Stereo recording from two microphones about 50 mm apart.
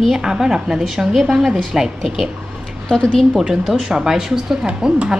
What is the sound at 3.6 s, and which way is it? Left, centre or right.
A woman's voice, centre.